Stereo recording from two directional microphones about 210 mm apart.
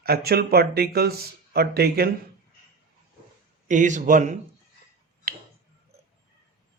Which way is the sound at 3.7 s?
35° right (ahead or behind).